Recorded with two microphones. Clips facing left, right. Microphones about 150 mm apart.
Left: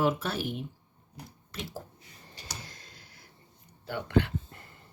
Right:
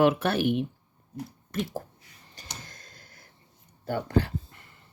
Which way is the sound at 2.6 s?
45° right (ahead or behind).